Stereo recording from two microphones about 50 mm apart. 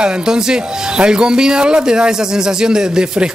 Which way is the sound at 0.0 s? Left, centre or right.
Centre.